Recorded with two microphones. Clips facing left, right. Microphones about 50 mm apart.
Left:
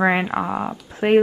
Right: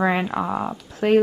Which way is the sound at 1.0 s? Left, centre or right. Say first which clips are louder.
Left 1 dB; left.